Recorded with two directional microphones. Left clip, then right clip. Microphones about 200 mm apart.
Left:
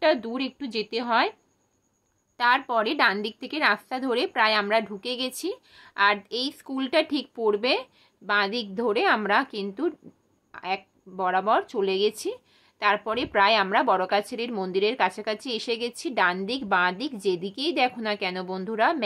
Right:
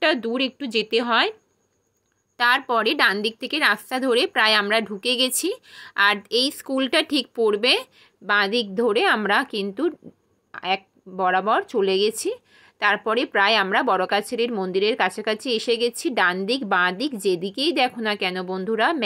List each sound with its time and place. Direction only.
0.0 s a woman's voice: 15° right (ahead or behind)
2.3 s a woman's voice: 15° right (ahead or behind)